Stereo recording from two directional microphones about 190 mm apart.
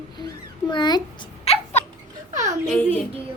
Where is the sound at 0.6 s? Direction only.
25° left (ahead or behind).